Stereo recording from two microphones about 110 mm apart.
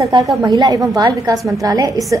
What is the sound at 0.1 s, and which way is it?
A woman's voice, 45° right (ahead or behind).